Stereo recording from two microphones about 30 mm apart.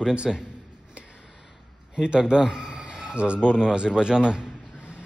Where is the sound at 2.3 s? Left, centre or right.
Right.